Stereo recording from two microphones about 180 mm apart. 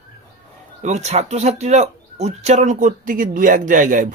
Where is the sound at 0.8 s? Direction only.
40° right (ahead or behind).